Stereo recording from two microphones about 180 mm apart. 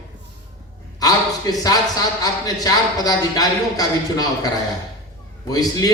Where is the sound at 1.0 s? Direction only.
20° left (ahead or behind).